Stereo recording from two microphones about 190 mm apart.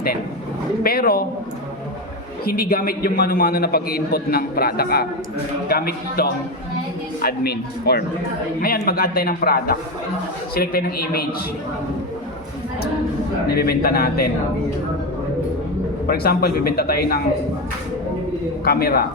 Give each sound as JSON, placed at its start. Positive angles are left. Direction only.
{"t": 0.8, "sound": "a man's voice", "side_deg": 50}
{"t": 2.4, "sound": "a man's voice", "side_deg": 50}
{"t": 13.5, "sound": "a man's voice", "side_deg": 55}
{"t": 16.0, "sound": "a man's voice", "side_deg": 55}
{"t": 18.6, "sound": "a man's voice", "side_deg": 55}